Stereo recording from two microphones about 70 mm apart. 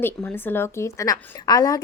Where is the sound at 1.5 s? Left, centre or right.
Left.